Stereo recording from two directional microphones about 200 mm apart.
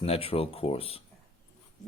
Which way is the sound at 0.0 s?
30° left (ahead or behind).